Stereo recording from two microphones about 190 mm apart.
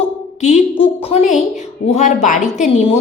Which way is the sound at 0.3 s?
40° left (ahead or behind).